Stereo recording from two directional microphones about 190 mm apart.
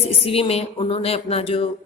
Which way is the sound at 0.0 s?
30° left (ahead or behind).